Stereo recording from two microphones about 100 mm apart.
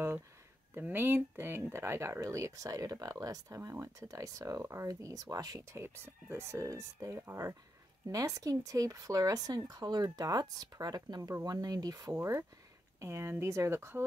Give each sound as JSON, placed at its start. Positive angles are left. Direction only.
{"t": 0.7, "sound": "speech", "side_deg": -20}